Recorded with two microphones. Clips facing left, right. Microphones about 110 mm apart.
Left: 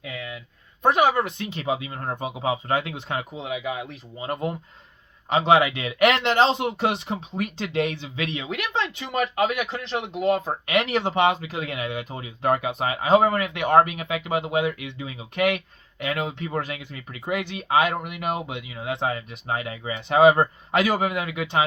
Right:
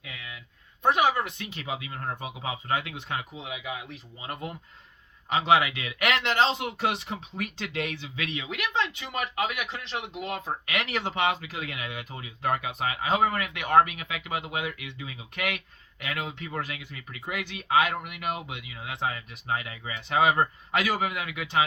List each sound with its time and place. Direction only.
0.0 s a sound: 35° left (ahead or behind)
0.8 s speech: 45° left (ahead or behind)
1.4 s speech: 30° left (ahead or behind)
10.7 s speech: 25° left (ahead or behind)